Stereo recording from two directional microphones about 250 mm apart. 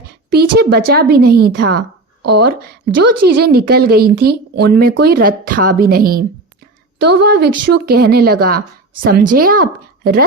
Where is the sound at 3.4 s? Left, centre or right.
Right.